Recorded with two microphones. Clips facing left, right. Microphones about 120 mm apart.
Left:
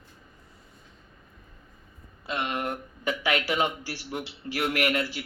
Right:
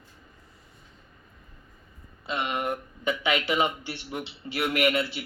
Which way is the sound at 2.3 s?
5° right (ahead or behind).